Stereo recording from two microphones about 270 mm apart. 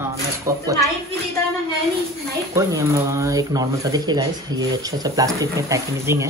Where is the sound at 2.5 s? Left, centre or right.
Centre.